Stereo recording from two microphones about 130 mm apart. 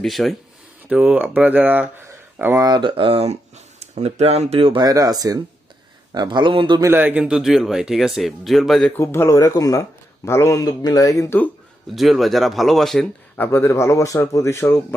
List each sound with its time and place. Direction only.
0.0 s speech: centre (ahead or behind)
2.0 s a sound: 20° right (ahead or behind)
2.7 s a man's voice: 40° right (ahead or behind)
6.8 s speech: 15° right (ahead or behind); by 8.9 s centre (ahead or behind)
9.0 s speech: 20° left (ahead or behind)
11.9 s speech: centre (ahead or behind)
13.4 s speech: 15° left (ahead or behind)